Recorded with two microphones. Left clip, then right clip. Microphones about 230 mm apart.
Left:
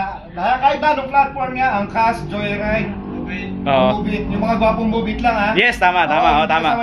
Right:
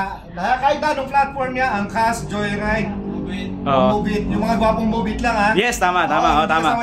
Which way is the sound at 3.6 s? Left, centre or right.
Centre.